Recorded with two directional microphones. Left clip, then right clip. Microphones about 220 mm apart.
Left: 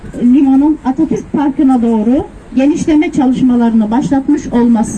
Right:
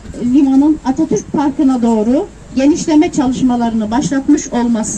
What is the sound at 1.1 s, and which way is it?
Speech, 15° left (ahead or behind).